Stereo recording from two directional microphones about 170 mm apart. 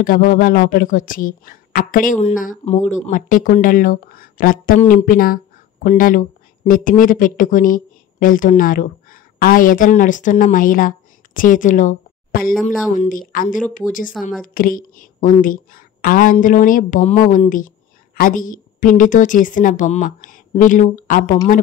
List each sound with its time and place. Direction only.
0.0 s a woman's voice: 55° left (ahead or behind)